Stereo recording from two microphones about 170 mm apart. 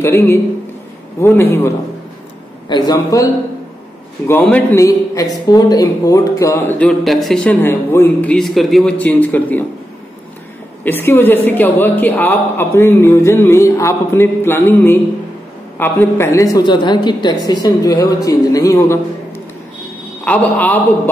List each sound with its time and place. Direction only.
0.0 s speech: 15° left (ahead or behind)
2.7 s a woman's voice: 25° left (ahead or behind)
4.3 s speech: 10° left (ahead or behind)
10.8 s a woman's voice: 10° left (ahead or behind)